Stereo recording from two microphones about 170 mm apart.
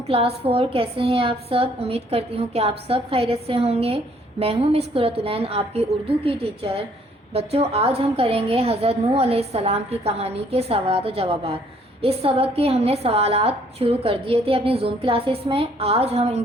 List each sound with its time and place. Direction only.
0.1 s a woman's voice: 35° right (ahead or behind)